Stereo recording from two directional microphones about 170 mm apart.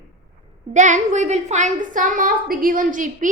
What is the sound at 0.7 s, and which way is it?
A woman's voice, 45° right (ahead or behind).